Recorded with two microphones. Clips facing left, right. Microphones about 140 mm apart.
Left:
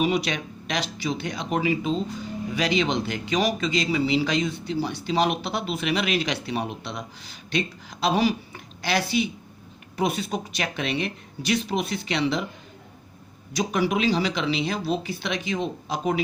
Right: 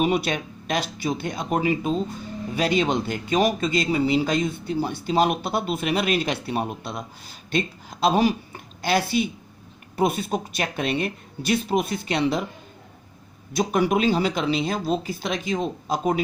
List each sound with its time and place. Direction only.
0.0 s speech: 50° right (ahead or behind)
13.6 s speech: 50° right (ahead or behind)